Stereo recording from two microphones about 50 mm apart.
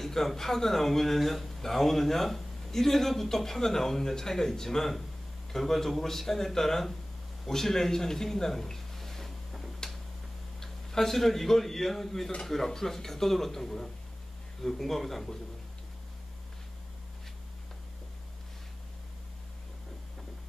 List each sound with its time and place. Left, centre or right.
0.0 s speech: centre
7.4 s a sound: centre
10.6 s speech: centre